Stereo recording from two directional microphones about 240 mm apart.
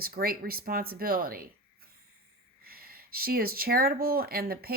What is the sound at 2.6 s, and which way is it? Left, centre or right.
Speech, right.